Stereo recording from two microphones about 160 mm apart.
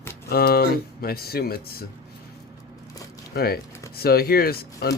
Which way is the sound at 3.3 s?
75° left (ahead or behind).